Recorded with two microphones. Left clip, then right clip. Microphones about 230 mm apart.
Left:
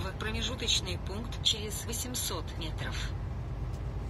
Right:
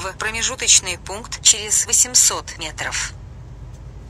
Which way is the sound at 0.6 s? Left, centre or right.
Right.